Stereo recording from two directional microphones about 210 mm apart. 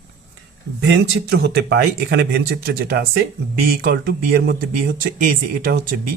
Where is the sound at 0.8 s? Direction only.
55° right (ahead or behind).